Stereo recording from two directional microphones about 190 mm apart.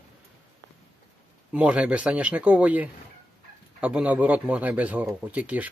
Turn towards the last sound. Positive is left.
turn(degrees=-10)  # may be behind; listen again after turning